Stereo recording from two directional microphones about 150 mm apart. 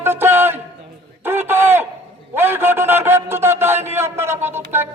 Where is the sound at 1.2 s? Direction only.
15° right (ahead or behind).